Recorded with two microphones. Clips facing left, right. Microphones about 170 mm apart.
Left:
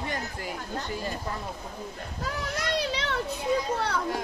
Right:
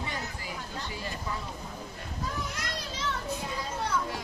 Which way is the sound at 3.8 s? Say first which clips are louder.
Left 3 dB; 70° left (ahead or behind).